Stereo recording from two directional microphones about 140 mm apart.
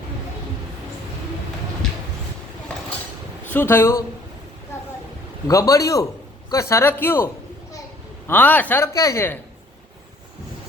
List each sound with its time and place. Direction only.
3.4 s speech: 15° left (ahead or behind)
4.7 s a sound: 20° left (ahead or behind)
5.5 s a man's voice: 25° left (ahead or behind)
8.3 s speech: 10° left (ahead or behind)